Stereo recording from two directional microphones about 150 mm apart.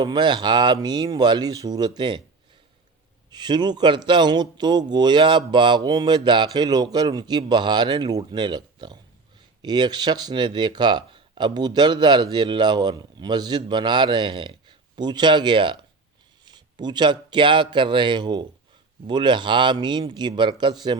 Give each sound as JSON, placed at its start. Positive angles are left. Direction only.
{"t": 0.0, "sound": "speech", "side_deg": -30}
{"t": 3.2, "sound": "speech", "side_deg": -30}